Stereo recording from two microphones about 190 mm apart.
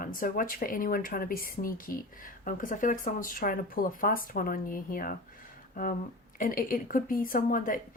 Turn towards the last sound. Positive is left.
turn(degrees=45)  # may be behind; listen again after turning